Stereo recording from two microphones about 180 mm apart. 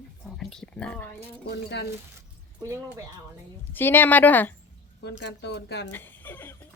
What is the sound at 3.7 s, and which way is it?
Speech, 10° left (ahead or behind).